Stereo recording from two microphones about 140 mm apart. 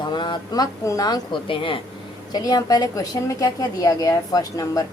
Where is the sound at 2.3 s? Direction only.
30° left (ahead or behind).